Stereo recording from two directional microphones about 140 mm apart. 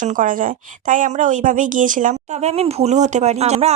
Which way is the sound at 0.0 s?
70° right (ahead or behind).